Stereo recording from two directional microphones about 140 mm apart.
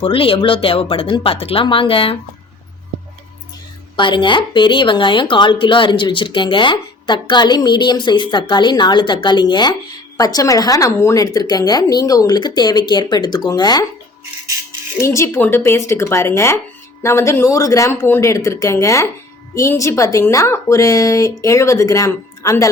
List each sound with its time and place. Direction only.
0.0 s a woman's voice: 40° left (ahead or behind)
3.9 s a woman's voice: 35° left (ahead or behind)
14.9 s speech: 20° left (ahead or behind)